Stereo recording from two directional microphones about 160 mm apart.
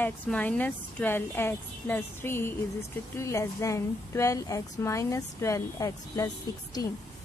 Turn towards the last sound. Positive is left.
turn(degrees=25)  # may be behind; listen again after turning